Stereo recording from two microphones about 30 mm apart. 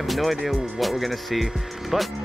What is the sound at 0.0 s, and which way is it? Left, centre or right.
Music, centre.